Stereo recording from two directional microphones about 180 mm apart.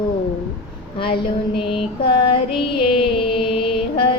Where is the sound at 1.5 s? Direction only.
30° left (ahead or behind).